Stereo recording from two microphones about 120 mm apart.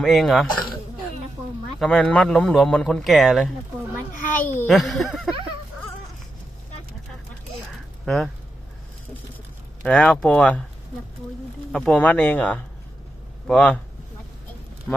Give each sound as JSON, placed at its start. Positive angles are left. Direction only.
{"t": 0.0, "sound": "a man's voice", "side_deg": 0}
{"t": 1.8, "sound": "a man's voice", "side_deg": 10}
{"t": 4.7, "sound": "a man's voice", "side_deg": 0}
{"t": 8.0, "sound": "speech", "side_deg": 5}
{"t": 9.8, "sound": "speech", "side_deg": 5}
{"t": 11.7, "sound": "speech", "side_deg": 5}
{"t": 14.9, "sound": "a sound", "side_deg": 15}